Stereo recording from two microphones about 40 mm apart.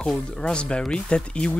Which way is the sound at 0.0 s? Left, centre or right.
Centre.